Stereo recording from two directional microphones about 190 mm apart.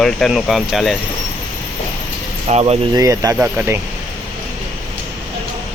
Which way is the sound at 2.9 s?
20° right (ahead or behind).